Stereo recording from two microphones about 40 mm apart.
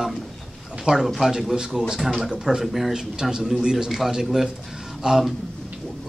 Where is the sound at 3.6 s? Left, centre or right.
Centre.